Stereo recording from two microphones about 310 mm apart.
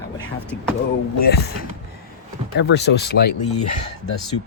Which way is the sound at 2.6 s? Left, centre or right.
Left.